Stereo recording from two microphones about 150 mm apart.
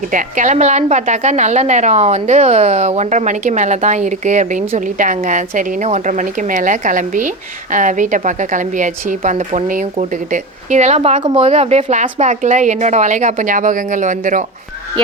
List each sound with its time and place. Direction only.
0.1 s a woman's voice: 60° right (ahead or behind)